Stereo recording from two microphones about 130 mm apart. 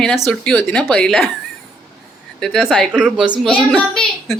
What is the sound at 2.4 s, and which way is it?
A man's voice, centre (ahead or behind).